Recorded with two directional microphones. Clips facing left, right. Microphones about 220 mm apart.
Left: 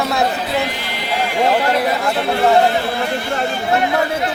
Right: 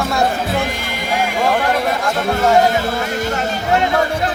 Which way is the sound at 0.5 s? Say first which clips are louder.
Even; 50° right (ahead or behind).